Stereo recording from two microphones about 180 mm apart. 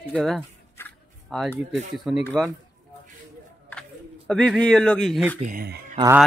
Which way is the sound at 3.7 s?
5° left (ahead or behind).